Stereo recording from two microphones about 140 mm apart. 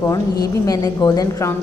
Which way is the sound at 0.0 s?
25° left (ahead or behind).